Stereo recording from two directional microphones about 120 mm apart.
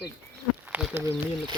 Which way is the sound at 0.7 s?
15° right (ahead or behind).